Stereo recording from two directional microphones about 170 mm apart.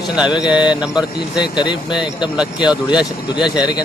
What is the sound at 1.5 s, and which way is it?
Speech, 25° left (ahead or behind).